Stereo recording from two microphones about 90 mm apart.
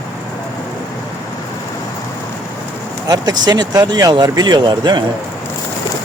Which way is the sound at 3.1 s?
45° right (ahead or behind).